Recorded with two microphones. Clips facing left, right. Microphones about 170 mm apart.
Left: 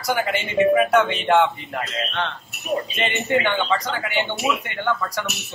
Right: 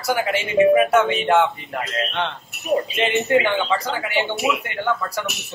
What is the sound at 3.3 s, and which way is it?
Speech, 5° right (ahead or behind).